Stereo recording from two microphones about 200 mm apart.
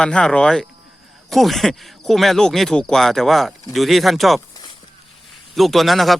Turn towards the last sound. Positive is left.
turn(degrees=0)  # may be behind; listen again after turning